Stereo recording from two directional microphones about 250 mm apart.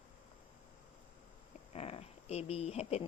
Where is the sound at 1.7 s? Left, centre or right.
Left.